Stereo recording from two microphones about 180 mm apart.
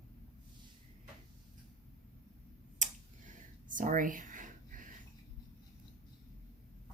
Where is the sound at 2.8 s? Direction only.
45° right (ahead or behind).